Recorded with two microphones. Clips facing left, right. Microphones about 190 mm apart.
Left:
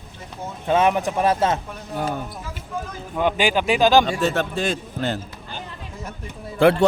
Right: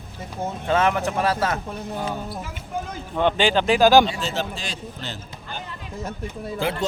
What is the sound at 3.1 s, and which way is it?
Speech, 10° left (ahead or behind).